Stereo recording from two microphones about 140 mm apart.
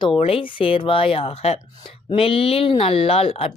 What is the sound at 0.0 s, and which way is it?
Speech, 40° left (ahead or behind).